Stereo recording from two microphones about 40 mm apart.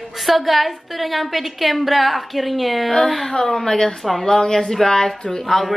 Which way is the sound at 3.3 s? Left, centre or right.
Centre.